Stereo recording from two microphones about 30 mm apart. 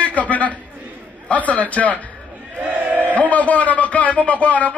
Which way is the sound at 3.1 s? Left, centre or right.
Left.